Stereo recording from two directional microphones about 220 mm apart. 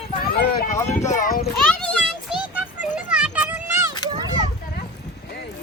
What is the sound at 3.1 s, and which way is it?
Children playing, 5° right (ahead or behind).